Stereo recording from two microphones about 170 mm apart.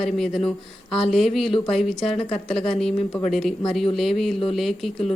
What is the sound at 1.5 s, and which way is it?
Speech, 30° left (ahead or behind).